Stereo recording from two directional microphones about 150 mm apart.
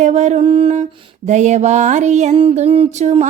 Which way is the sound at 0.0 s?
50° right (ahead or behind).